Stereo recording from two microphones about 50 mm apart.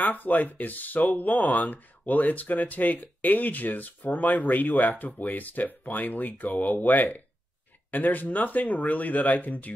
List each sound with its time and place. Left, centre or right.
0.0 s speech: left